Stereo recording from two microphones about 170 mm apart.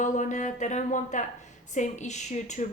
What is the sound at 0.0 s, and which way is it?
A woman's voice, 45° left (ahead or behind).